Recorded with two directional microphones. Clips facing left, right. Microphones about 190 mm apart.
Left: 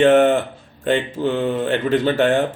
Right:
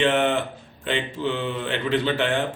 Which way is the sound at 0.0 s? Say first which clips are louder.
Left 8 dB; 45° left (ahead or behind).